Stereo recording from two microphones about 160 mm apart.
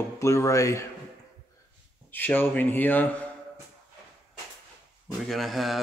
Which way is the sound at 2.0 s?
10° left (ahead or behind).